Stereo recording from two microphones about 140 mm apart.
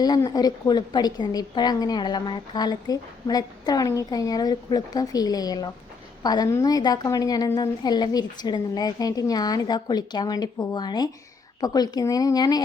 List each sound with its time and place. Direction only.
0.0 s a woman's voice: 30° left (ahead or behind)